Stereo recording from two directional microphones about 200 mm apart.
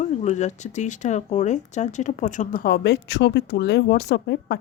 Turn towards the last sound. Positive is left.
turn(degrees=55)  # may be behind; listen again after turning